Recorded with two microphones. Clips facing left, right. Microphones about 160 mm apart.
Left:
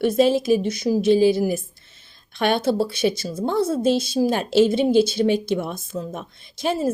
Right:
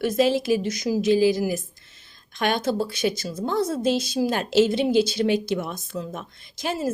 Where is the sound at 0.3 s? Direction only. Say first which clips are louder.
Left 3 dB; 55° left (ahead or behind).